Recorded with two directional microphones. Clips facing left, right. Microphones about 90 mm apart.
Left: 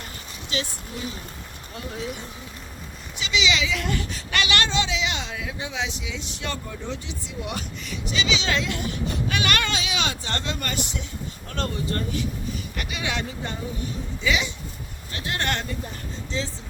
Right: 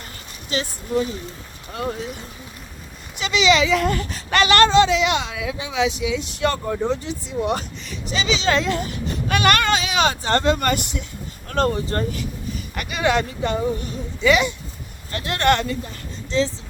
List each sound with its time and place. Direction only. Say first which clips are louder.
0.5 s speech: right 9 dB; 40° right (ahead or behind)
2.0 s speech: even; centre (ahead or behind)
3.2 s a child's voice: right 7 dB; 45° right (ahead or behind); by 6.1 s 75° right (ahead or behind)
6.1 s a child's voice: right 10 dB; 55° right (ahead or behind)
6.8 s speech: right 9 dB; 40° right (ahead or behind)
9.3 s a child's voice: right 9 dB; 50° right (ahead or behind)
11.4 s a child's voice: right 8 dB; 45° right (ahead or behind)
12.7 s speech: right 11 dB; 50° right (ahead or behind)
13.4 s speech: right 10 dB; 75° right (ahead or behind)
14.3 s speech: right 8 dB; 55° right (ahead or behind)